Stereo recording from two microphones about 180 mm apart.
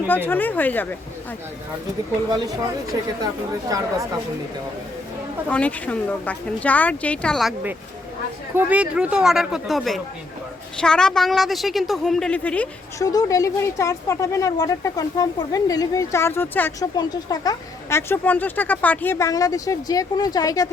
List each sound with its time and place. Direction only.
0.1 s speech: 10° left (ahead or behind)
3.7 s speech: 20° right (ahead or behind)
5.5 s a woman's voice: 10° left (ahead or behind)
13.0 s speech: 20° left (ahead or behind)